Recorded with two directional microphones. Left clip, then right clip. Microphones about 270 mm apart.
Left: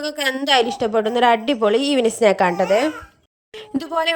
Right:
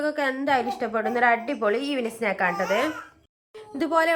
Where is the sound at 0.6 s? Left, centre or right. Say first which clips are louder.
Left 7 dB; left.